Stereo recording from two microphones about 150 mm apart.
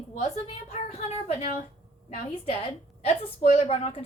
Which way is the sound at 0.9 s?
45° left (ahead or behind).